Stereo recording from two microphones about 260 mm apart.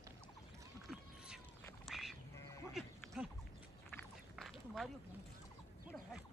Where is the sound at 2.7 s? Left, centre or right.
Centre.